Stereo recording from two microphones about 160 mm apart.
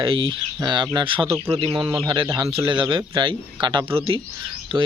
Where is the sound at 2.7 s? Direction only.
30° right (ahead or behind).